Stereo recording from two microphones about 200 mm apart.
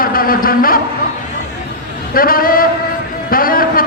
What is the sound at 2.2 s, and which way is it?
Speech, 45° left (ahead or behind).